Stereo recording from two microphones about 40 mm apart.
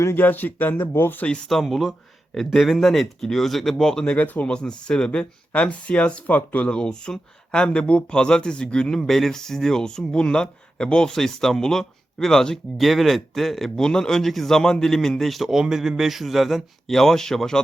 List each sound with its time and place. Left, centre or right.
0.2 s speech: left
1.6 s speech: centre
3.2 s speech: centre
3.8 s speech: centre
4.1 s speech: left
4.4 s speech: left
6.2 s speech: left
6.7 s speech: left
11.1 s speech: centre
12.7 s speech: centre
13.7 s speech: centre
15.4 s speech: centre
16.8 s speech: centre